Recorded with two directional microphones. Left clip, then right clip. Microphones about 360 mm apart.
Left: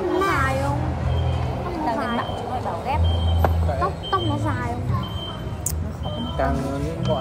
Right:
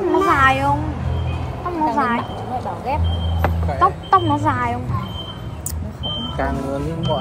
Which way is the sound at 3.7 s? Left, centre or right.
Centre.